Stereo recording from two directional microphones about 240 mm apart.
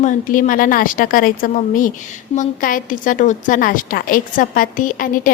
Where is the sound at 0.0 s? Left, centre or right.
Left.